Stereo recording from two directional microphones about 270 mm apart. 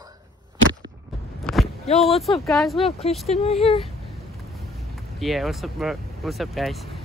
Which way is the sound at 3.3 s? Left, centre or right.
Left.